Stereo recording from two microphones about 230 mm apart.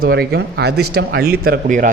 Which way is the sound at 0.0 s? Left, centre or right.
Right.